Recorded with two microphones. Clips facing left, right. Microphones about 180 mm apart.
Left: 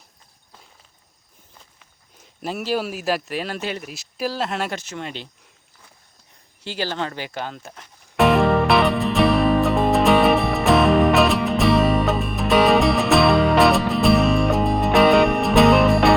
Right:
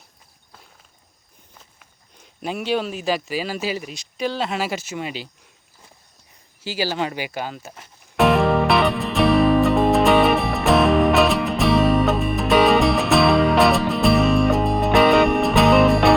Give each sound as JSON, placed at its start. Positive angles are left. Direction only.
{"t": 2.1, "sound": "speech", "side_deg": 0}
{"t": 6.6, "sound": "music", "side_deg": -5}